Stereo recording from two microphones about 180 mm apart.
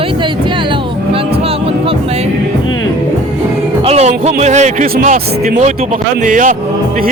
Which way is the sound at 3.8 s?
35° right (ahead or behind).